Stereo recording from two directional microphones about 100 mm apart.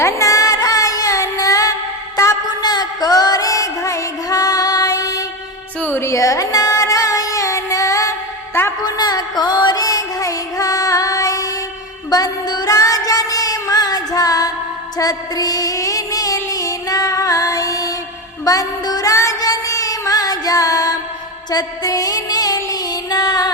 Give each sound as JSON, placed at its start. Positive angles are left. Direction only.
{"t": 0.0, "sound": "music", "side_deg": 30}
{"t": 5.8, "sound": "music", "side_deg": 25}
{"t": 18.4, "sound": "child singing", "side_deg": 35}
{"t": 21.5, "sound": "music", "side_deg": 35}